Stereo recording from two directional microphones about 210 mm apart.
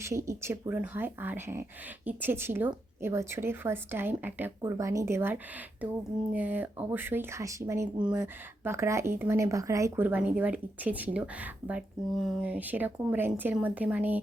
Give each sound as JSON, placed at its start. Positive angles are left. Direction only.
{"t": 0.0, "sound": "speech", "side_deg": -15}